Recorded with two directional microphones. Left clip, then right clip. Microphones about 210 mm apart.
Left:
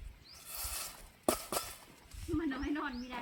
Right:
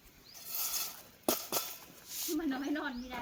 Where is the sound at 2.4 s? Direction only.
45° right (ahead or behind).